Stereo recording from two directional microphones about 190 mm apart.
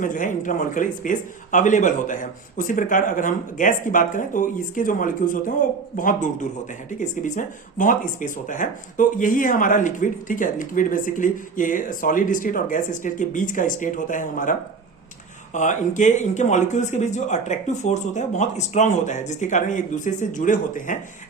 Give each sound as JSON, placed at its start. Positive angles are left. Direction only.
{"t": 0.0, "sound": "speech", "side_deg": 45}
{"t": 15.5, "sound": "speech", "side_deg": 40}